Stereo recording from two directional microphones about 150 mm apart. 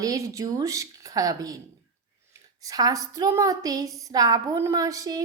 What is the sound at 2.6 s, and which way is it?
A woman's voice, 25° right (ahead or behind).